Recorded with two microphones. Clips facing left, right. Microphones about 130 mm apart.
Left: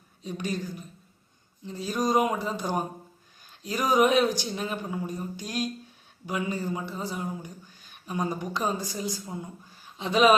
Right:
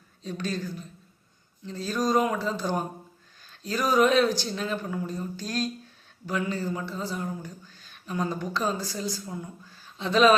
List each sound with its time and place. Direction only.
0.2 s speech: 15° left (ahead or behind)